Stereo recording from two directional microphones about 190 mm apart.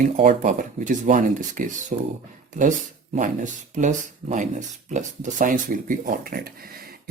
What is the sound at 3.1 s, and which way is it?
Speech, 40° right (ahead or behind).